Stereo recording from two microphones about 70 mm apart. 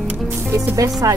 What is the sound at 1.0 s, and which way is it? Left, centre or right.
Speech, right.